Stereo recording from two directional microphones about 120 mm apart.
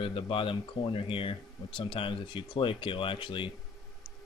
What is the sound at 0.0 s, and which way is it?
Speech, 45° left (ahead or behind).